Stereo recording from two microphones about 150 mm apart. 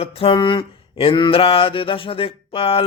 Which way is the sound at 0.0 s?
40° left (ahead or behind).